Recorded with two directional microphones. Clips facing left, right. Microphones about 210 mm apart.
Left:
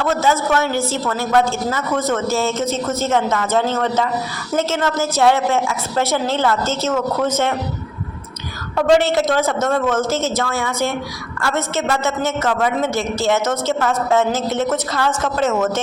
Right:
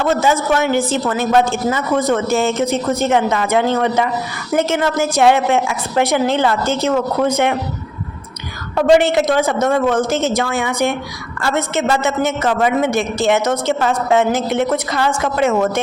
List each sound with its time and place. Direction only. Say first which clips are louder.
0.0 s a man's voice: right 2 dB; 15° right (ahead or behind)
8.9 s a man's voice: right 2 dB; 15° right (ahead or behind)